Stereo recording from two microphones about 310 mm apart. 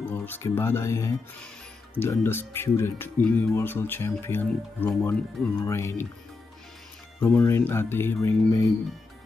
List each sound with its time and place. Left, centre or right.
0.0 s speech: centre
7.2 s speech: centre